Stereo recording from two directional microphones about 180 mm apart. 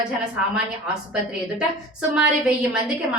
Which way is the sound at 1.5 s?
5° right (ahead or behind).